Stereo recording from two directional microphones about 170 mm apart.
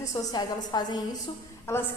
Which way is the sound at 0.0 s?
20° left (ahead or behind).